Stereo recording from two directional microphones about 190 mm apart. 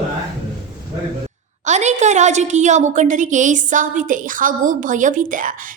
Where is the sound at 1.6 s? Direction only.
40° right (ahead or behind).